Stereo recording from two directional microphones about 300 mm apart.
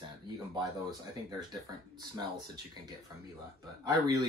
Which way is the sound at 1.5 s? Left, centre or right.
Centre.